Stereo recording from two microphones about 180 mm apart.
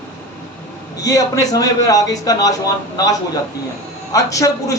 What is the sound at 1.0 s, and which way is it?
A man's voice, 20° left (ahead or behind).